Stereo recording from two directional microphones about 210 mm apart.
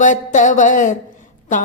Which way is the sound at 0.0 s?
35° left (ahead or behind).